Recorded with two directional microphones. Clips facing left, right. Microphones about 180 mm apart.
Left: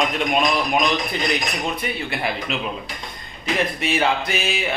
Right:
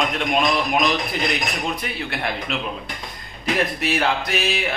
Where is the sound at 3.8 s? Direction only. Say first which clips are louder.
Left 1 dB; centre (ahead or behind).